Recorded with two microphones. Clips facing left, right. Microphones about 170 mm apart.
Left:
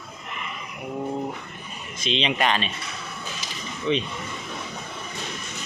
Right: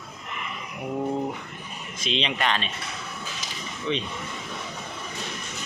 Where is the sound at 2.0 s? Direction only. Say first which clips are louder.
Left 3 dB; centre (ahead or behind).